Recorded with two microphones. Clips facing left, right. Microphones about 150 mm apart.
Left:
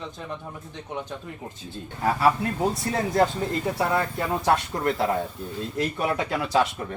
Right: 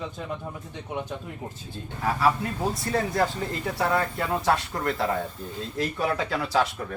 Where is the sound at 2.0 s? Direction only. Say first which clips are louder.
Left 2 dB; 25° left (ahead or behind).